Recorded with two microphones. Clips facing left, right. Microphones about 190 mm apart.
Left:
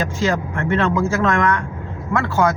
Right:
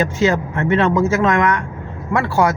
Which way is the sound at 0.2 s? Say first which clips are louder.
Right 3 dB; 20° right (ahead or behind).